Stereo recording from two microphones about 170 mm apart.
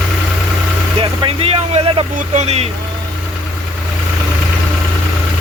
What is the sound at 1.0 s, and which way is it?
Vehicle, 30° right (ahead or behind).